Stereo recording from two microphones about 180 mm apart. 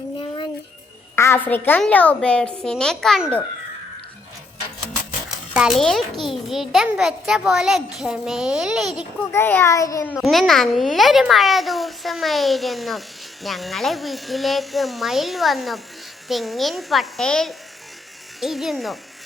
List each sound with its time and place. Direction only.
0.2 s music: 25° left (ahead or behind)
1.1 s a child's voice: 15° left (ahead or behind)
5.5 s a child's voice: centre (ahead or behind)
9.3 s a child's voice: 15° left (ahead or behind)
10.2 s a child's voice: centre (ahead or behind)